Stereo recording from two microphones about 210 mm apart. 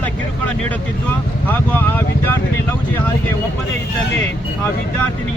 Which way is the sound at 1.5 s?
10° left (ahead or behind).